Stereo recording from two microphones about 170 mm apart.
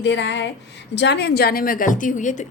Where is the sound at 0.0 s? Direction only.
90° left.